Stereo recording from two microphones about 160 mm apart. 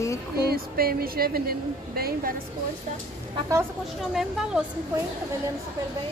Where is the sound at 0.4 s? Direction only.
75° right (ahead or behind).